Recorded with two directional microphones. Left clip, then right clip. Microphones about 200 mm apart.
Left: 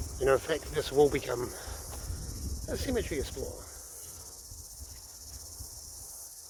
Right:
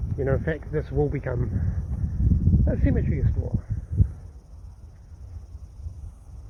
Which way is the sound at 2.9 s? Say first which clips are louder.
Right 1 dB; 20° left (ahead or behind).